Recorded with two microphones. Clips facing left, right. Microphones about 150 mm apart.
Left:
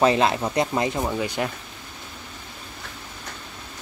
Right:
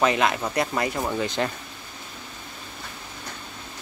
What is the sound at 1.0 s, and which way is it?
Speech, 10° left (ahead or behind).